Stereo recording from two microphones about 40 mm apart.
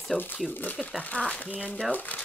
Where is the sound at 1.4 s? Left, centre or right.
Left.